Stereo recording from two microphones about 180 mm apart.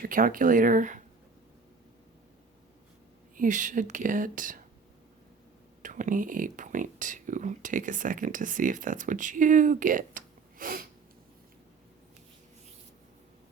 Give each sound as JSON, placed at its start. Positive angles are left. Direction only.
{"t": 0.0, "sound": "speech", "side_deg": -50}
{"t": 3.3, "sound": "speech", "side_deg": -45}
{"t": 5.8, "sound": "speech", "side_deg": -45}